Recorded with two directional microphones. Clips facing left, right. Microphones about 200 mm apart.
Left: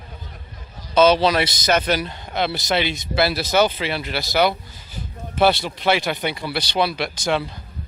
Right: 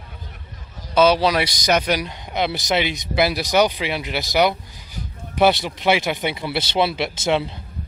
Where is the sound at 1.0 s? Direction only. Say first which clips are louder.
Left 1 dB; 10° right (ahead or behind).